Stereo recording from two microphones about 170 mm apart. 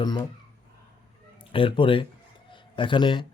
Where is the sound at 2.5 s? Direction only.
30° left (ahead or behind).